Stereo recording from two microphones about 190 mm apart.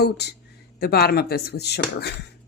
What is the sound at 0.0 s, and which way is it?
Speech, 60° left (ahead or behind).